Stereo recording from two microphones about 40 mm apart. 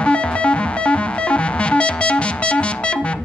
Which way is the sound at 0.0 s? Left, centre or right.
Left.